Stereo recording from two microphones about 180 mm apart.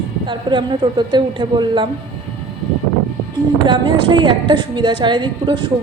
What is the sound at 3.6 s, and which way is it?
A woman's voice, 25° right (ahead or behind).